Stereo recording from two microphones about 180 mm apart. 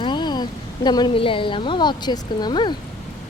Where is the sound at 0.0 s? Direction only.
25° left (ahead or behind).